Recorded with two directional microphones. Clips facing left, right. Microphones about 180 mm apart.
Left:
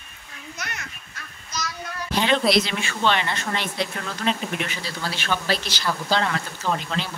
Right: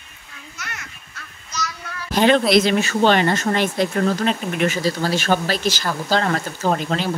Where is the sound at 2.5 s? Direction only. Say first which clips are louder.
Right 7 dB; 45° right (ahead or behind).